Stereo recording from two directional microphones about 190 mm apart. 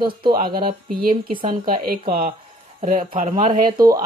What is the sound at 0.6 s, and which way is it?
Speech, 50° right (ahead or behind).